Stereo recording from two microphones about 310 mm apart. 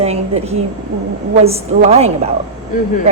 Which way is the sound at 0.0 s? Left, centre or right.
Centre.